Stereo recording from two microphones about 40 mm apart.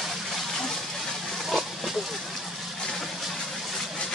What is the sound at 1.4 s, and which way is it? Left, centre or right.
Pig, centre.